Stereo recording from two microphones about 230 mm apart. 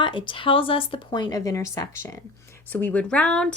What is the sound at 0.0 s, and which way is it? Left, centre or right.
Speech, left.